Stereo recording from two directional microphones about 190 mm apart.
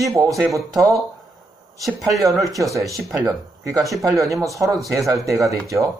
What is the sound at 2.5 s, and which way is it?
Speech, 15° right (ahead or behind).